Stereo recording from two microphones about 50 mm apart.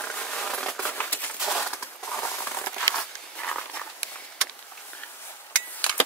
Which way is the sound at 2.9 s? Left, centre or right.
Centre.